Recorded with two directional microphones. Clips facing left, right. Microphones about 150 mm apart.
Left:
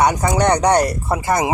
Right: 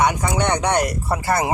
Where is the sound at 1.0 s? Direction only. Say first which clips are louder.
Left 2 dB; 20° left (ahead or behind).